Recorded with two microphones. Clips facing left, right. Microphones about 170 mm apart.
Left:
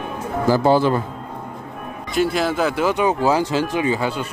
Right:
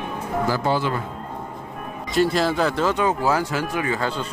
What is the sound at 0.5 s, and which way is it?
Speech, 35° left (ahead or behind).